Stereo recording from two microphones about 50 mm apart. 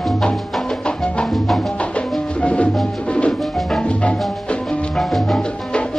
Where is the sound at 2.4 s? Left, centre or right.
Left.